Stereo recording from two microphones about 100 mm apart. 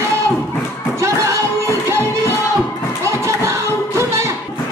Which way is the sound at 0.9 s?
30° right (ahead or behind).